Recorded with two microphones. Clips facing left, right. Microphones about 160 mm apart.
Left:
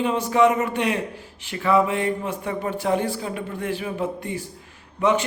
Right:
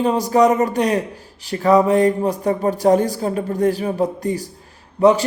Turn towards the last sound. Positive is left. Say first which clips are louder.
# right 7 dB
turn(degrees=-35)  # may be behind; listen again after turning